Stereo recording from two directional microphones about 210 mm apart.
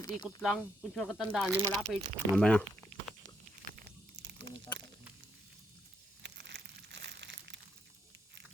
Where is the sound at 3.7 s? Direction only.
55° right (ahead or behind).